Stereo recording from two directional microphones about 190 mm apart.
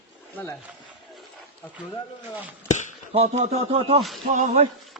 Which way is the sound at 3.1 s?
35° right (ahead or behind).